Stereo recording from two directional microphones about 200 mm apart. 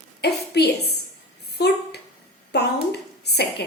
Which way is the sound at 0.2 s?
55° left (ahead or behind).